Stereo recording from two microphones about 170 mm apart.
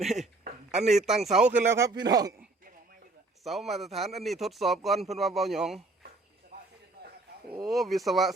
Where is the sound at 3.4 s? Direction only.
Centre (ahead or behind).